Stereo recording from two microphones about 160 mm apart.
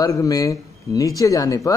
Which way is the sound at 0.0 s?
20° left (ahead or behind).